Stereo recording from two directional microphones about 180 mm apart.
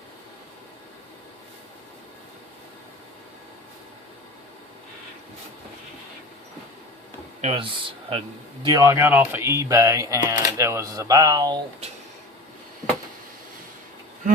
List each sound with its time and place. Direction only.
7.4 s speech: 30° right (ahead or behind)